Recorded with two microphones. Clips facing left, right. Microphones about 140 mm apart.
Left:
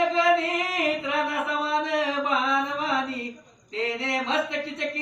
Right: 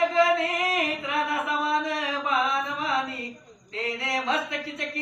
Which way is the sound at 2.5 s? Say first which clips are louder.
Left 2 dB; 25° left (ahead or behind).